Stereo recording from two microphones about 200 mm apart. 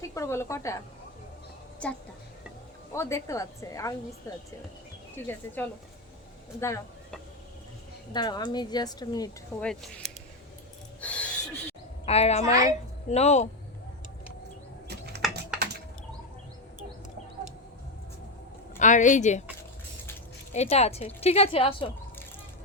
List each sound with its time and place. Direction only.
0.1 s a woman's voice: 15° left (ahead or behind)
1.8 s a woman's voice: 5° left (ahead or behind)
8.1 s speech: 20° left (ahead or behind)
9.6 s speech: 5° left (ahead or behind)
11.0 s a sound: 5° left (ahead or behind)
12.0 s a woman's voice: 30° left (ahead or behind)
14.8 s a sound: 55° right (ahead or behind)
18.8 s a woman's voice: 40° left (ahead or behind)
20.5 s a woman's voice: 35° left (ahead or behind)